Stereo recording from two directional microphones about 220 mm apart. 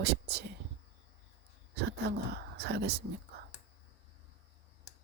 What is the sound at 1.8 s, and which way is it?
Speech, 50° right (ahead or behind).